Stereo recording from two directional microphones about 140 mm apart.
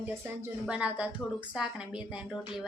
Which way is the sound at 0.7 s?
10° right (ahead or behind).